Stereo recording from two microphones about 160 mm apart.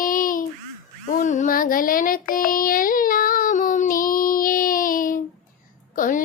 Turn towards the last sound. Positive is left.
turn(degrees=55)  # may be behind; listen again after turning